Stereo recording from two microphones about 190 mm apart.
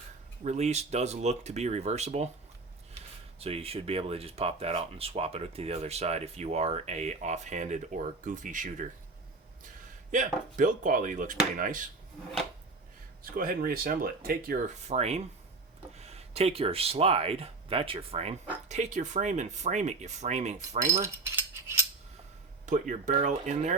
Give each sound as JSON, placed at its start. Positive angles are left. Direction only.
{"t": 0.4, "sound": "speech", "side_deg": -35}
{"t": 3.4, "sound": "speech", "side_deg": -30}
{"t": 10.1, "sound": "speech", "side_deg": -45}
{"t": 13.3, "sound": "speech", "side_deg": -50}
{"t": 21.0, "sound": "cutlery", "side_deg": -15}
{"t": 22.6, "sound": "speech", "side_deg": -40}